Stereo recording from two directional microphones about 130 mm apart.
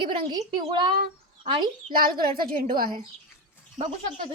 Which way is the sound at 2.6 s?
90° right.